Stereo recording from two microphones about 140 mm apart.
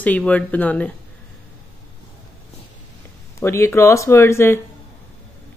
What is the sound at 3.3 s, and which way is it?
Speech, 20° left (ahead or behind).